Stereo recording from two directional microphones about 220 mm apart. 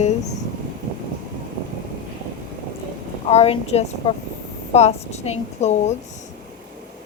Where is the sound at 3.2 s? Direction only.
25° left (ahead or behind).